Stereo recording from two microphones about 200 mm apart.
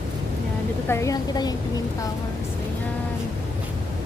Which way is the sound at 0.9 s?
15° left (ahead or behind).